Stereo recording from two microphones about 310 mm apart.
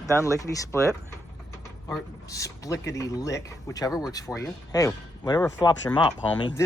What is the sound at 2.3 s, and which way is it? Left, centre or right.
Speech, centre.